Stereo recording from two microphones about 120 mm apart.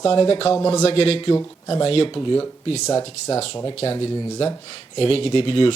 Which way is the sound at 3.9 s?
45° left (ahead or behind).